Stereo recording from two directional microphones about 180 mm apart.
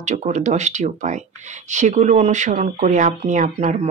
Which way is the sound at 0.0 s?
40° right (ahead or behind).